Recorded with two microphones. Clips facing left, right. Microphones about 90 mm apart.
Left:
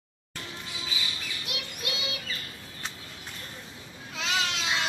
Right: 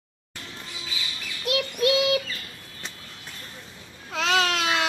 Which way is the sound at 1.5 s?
65° right (ahead or behind).